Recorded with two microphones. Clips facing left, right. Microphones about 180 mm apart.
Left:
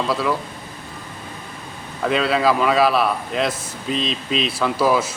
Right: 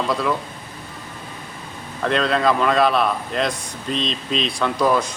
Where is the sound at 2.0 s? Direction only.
5° left (ahead or behind).